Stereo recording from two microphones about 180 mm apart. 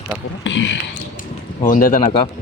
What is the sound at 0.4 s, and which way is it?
Speech, 90° left.